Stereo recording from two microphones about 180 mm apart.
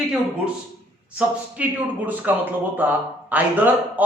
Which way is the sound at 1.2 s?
5° right (ahead or behind).